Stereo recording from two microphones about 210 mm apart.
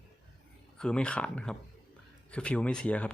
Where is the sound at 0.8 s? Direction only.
5° left (ahead or behind).